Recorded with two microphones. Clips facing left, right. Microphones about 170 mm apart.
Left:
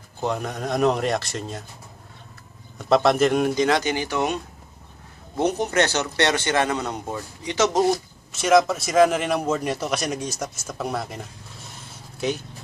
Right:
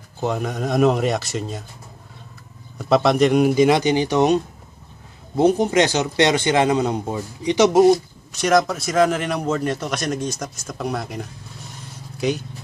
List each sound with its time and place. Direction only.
0.2 s a man's voice: centre (ahead or behind)
2.8 s a man's voice: centre (ahead or behind)
3.5 s speech: 15° right (ahead or behind)
5.4 s speech: 30° right (ahead or behind)
5.7 s a man's voice: 15° right (ahead or behind)
8.3 s a man's voice: centre (ahead or behind)